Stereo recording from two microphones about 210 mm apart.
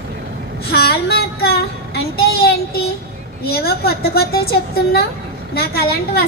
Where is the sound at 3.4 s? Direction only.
50° left (ahead or behind).